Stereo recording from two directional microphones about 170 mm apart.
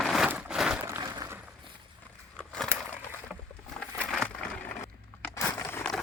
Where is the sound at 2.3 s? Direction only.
5° left (ahead or behind).